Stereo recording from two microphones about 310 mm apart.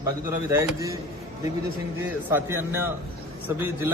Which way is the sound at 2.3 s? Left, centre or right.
Centre.